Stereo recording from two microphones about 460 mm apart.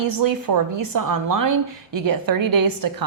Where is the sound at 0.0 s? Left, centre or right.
Right.